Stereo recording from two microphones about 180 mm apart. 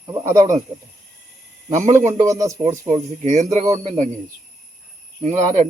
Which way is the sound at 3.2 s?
40° right (ahead or behind).